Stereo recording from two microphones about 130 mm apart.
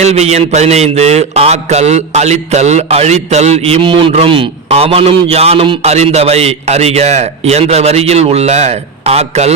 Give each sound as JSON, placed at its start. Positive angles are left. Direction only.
{"t": 0.0, "sound": "mantra", "side_deg": -55}